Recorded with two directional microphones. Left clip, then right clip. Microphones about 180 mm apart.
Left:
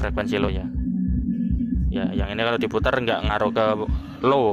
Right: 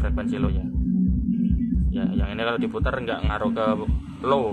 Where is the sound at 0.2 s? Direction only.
35° left (ahead or behind).